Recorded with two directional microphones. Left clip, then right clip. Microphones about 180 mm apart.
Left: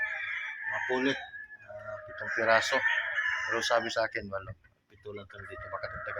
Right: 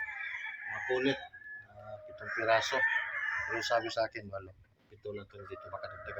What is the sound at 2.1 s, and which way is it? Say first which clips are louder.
Speech: left 4 dB; 35° left (ahead or behind).